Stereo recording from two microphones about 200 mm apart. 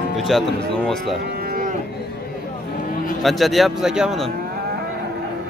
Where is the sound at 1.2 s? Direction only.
45° right (ahead or behind).